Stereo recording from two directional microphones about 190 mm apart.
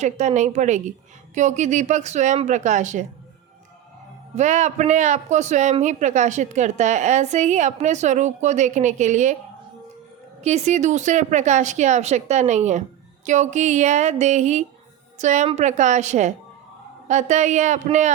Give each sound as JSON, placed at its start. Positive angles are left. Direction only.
{"t": 0.0, "sound": "a man's voice", "side_deg": -35}
{"t": 4.4, "sound": "a man's voice", "side_deg": -35}
{"t": 10.4, "sound": "a man's voice", "side_deg": -35}